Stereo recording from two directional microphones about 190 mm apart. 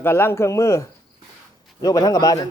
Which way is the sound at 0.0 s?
10° left (ahead or behind).